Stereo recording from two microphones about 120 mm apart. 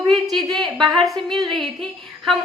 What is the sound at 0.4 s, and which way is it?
Speech, 35° right (ahead or behind).